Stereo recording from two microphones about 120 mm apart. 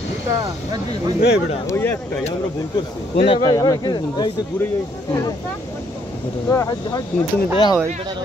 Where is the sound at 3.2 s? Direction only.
45° left (ahead or behind).